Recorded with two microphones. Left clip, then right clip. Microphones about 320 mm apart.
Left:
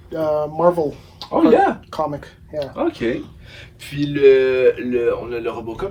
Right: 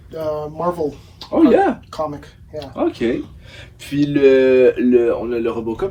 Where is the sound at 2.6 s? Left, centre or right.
Centre.